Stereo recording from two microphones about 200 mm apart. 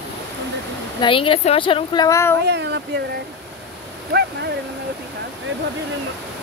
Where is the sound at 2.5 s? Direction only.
60° right (ahead or behind).